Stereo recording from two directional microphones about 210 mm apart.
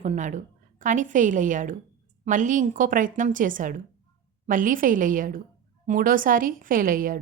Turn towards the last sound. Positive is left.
turn(degrees=-40)  # may be behind; listen again after turning